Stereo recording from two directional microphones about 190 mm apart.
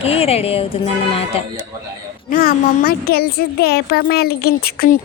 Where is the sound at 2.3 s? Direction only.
50° left (ahead or behind).